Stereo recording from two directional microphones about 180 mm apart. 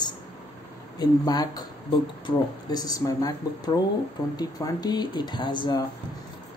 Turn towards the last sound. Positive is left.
turn(degrees=25)  # may be behind; listen again after turning